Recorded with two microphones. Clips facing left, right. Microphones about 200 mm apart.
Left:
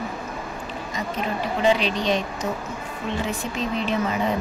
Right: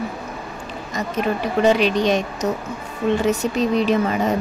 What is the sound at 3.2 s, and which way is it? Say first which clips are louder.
Speech: right 8 dB; 40° right (ahead or behind).